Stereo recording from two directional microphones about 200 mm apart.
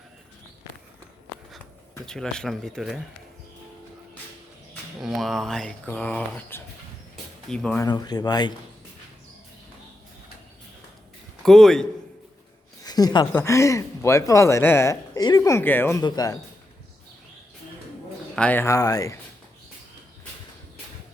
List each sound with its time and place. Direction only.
2.0 s speech: 5° left (ahead or behind)
4.9 s speech: centre (ahead or behind)
7.8 s speech: 20° left (ahead or behind)
11.4 s speech: centre (ahead or behind)
12.8 s a sound: 20° left (ahead or behind)
13.3 s speech: 15° left (ahead or behind)
18.3 s speech: 10° left (ahead or behind)